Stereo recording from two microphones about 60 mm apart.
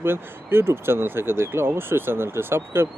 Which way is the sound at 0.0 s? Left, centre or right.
Right.